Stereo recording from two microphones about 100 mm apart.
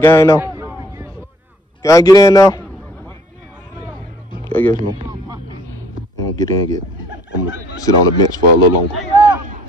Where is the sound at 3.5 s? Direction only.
20° right (ahead or behind).